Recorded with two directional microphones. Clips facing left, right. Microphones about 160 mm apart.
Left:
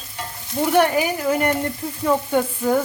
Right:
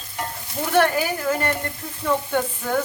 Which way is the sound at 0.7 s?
15° left (ahead or behind).